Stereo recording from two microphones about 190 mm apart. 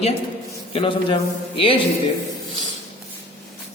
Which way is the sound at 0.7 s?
30° left (ahead or behind).